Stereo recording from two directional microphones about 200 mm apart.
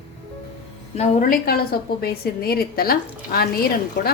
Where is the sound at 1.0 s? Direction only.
40° left (ahead or behind).